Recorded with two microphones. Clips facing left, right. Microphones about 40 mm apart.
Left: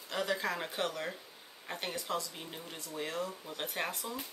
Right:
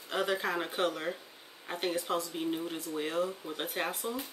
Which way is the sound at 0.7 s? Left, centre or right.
Right.